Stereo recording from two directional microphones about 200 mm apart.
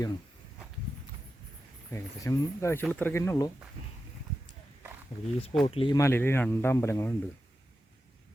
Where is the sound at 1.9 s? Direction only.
15° left (ahead or behind).